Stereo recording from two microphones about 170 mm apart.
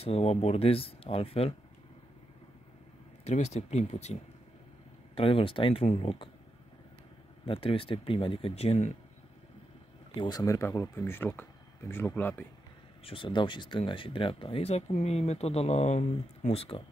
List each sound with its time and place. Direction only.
0.0 s speech: 35° left (ahead or behind)
3.3 s speech: 40° left (ahead or behind)
7.4 s speech: 30° left (ahead or behind)
10.1 s speech: 25° left (ahead or behind)
13.0 s speech: 30° left (ahead or behind)